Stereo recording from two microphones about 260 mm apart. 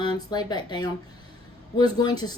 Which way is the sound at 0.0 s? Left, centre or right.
Centre.